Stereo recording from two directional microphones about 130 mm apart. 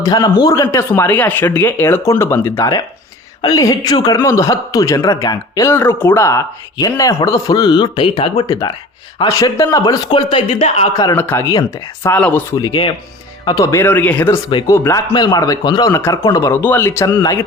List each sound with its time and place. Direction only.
0.0 s speech: 30° left (ahead or behind)
8.4 s speech: 25° left (ahead or behind)
10.1 s speech: 40° left (ahead or behind)
10.9 s speech: 30° left (ahead or behind)
11.2 s speech: 20° left (ahead or behind)
12.5 s speech: 35° left (ahead or behind); by 14.3 s 15° left (ahead or behind)
14.7 s speech: 25° left (ahead or behind)